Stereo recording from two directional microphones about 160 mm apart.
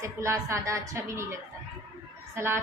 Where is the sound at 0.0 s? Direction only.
20° right (ahead or behind).